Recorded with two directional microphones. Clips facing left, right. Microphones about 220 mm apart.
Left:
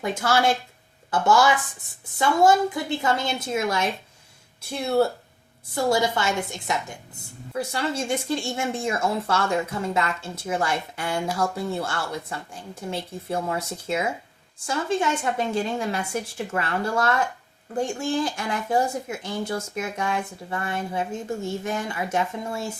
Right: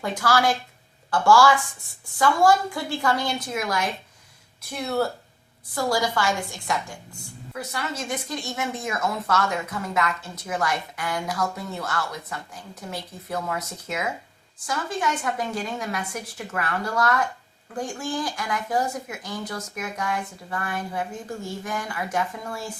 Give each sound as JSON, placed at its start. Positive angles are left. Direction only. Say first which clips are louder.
{"t": 0.0, "sound": "speech", "louder": "left 1 dB", "side_deg": 25}